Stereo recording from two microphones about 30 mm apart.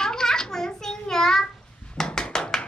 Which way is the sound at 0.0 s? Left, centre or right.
Left.